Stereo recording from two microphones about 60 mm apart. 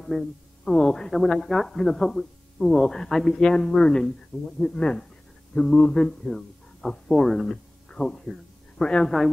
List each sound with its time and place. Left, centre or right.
0.0 s speech: centre